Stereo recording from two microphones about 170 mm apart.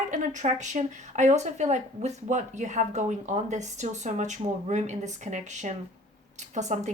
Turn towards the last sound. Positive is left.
turn(degrees=-45)  # may be behind; listen again after turning